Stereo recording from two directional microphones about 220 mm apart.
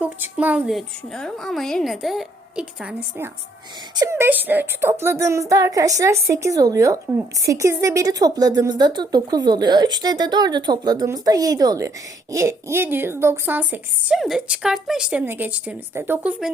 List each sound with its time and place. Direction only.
0.0 s a woman's voice: 10° right (ahead or behind)
3.9 s speech: 15° right (ahead or behind)